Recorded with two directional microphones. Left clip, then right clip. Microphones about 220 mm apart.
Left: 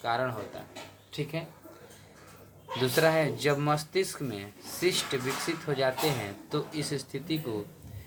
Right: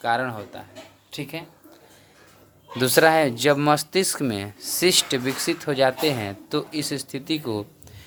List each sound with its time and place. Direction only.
0.0 s speech: 45° right (ahead or behind)
2.8 s speech: 50° right (ahead or behind)